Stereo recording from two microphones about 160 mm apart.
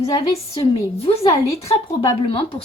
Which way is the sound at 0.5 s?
35° left (ahead or behind).